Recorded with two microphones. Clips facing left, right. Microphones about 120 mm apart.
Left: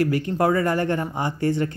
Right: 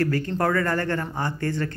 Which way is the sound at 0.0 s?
15° left (ahead or behind).